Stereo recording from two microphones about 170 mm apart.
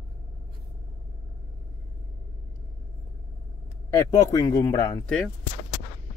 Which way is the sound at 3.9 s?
20° left (ahead or behind).